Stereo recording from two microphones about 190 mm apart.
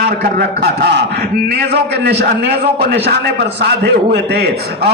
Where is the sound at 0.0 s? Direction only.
60° right (ahead or behind).